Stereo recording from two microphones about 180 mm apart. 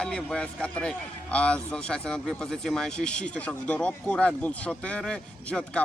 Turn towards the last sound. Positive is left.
turn(degrees=5)  # may be behind; listen again after turning